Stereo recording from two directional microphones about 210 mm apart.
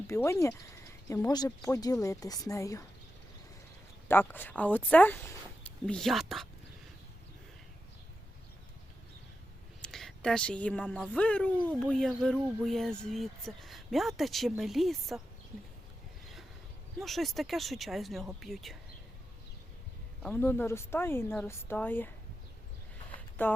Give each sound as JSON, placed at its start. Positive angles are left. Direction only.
{"t": 0.1, "sound": "speech", "side_deg": 15}
{"t": 4.1, "sound": "speech", "side_deg": 10}
{"t": 9.8, "sound": "speech", "side_deg": 0}
{"t": 17.0, "sound": "speech", "side_deg": 0}
{"t": 20.2, "sound": "speech", "side_deg": 10}
{"t": 23.4, "sound": "speech", "side_deg": 10}